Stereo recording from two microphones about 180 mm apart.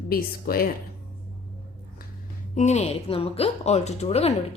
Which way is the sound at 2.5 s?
40° left (ahead or behind).